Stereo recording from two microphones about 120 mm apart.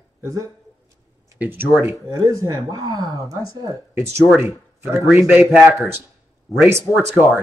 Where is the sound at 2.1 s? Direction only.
30° right (ahead or behind).